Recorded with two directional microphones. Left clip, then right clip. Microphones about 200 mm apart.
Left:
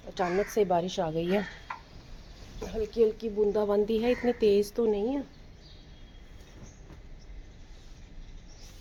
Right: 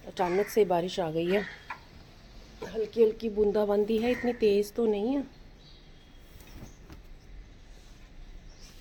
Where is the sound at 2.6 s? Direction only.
10° left (ahead or behind).